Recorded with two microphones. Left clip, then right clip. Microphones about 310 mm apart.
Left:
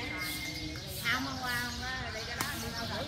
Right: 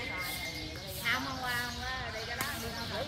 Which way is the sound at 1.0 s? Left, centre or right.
Right.